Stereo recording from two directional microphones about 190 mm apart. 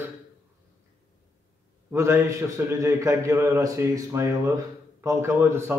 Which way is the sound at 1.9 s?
15° right (ahead or behind).